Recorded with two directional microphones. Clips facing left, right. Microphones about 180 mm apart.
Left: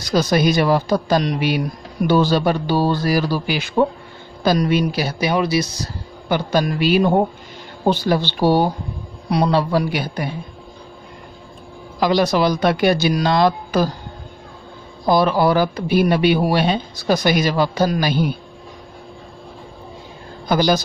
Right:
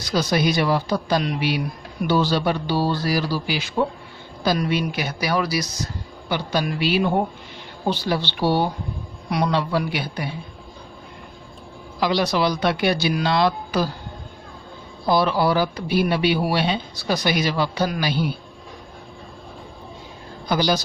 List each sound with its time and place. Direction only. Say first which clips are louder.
0.0 s speech: left 4 dB; 45° left (ahead or behind)
5.2 s speech: left 4 dB; 20° left (ahead or behind)
6.2 s speech: left 5 dB; 50° left (ahead or behind)
12.0 s speech: left 4 dB; 50° left (ahead or behind)
15.0 s speech: left 4 dB; 50° left (ahead or behind)
20.4 s speech: left 4 dB; 50° left (ahead or behind)